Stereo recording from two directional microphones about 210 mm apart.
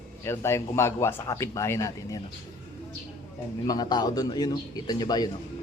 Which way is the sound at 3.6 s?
20° left (ahead or behind).